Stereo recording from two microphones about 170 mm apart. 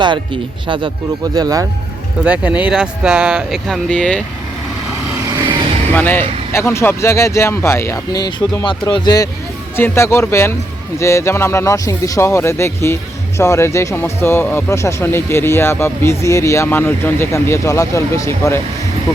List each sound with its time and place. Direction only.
1.4 s speech: 20° right (ahead or behind)
2.2 s speech: 10° right (ahead or behind)
5.9 s speech: 10° left (ahead or behind)